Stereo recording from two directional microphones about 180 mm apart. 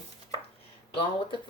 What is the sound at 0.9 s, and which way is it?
Speech, 30° left (ahead or behind).